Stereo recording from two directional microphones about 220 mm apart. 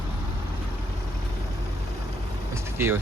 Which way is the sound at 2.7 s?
10° right (ahead or behind).